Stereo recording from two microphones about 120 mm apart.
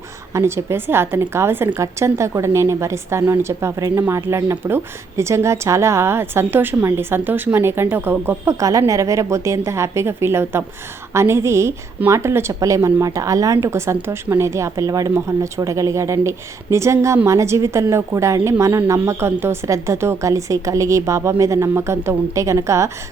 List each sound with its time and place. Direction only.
0.3 s speech: 20° right (ahead or behind)
8.5 s speech: 30° right (ahead or behind)